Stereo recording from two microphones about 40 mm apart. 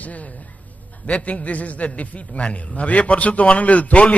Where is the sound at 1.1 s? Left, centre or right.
Left.